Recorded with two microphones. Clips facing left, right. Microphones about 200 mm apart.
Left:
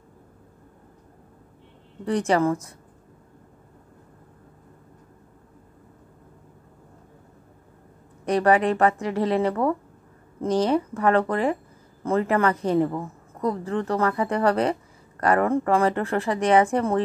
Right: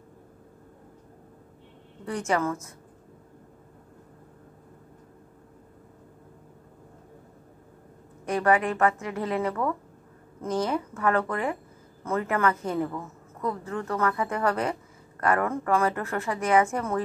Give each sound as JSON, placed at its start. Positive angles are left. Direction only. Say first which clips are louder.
{"t": 2.0, "sound": "a woman's voice", "louder": "left 6 dB", "side_deg": 35}
{"t": 8.3, "sound": "a woman's voice", "louder": "left 4 dB", "side_deg": 35}